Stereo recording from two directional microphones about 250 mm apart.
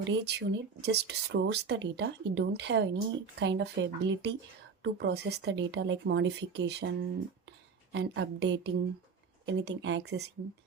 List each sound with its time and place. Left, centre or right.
0.1 s speech: right
7.9 s speech: right